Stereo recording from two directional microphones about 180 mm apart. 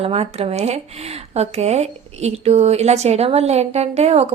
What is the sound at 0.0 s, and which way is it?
Speech, 35° right (ahead or behind).